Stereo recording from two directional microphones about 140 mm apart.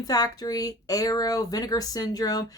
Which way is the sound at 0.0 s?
25° left (ahead or behind).